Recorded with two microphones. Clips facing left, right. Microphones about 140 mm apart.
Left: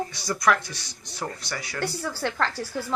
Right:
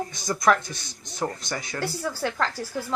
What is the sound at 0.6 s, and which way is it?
Speech, 50° right (ahead or behind).